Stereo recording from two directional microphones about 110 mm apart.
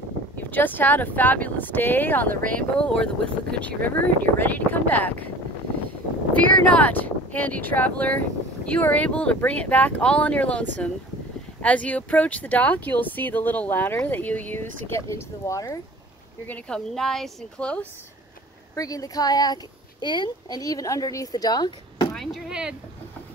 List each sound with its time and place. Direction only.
0.4 s speech: 15° left (ahead or behind)
6.3 s speech: 15° left (ahead or behind); by 15.8 s 30° left (ahead or behind)
16.4 s speech: 10° left (ahead or behind)
18.8 s speech: 35° left (ahead or behind)
22.1 s speech: centre (ahead or behind)